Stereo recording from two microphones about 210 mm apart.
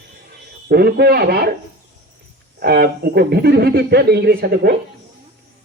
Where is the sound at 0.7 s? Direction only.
50° right (ahead or behind).